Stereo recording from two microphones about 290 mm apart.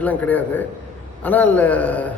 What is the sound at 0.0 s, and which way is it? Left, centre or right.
A man's voice, centre.